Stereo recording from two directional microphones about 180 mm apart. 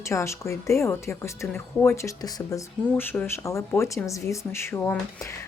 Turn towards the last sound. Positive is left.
turn(degrees=15)  # may be behind; listen again after turning